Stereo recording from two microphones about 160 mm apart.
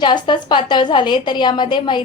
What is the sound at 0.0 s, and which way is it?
A woman's voice, 30° left (ahead or behind).